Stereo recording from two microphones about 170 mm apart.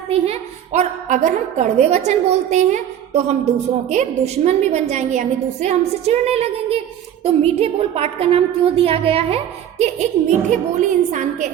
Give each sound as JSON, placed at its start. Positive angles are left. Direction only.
{"t": 0.1, "sound": "a woman's voice", "side_deg": -40}